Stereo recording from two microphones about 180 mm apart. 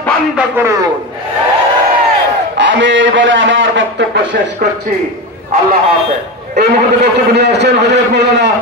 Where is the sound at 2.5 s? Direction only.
80° right.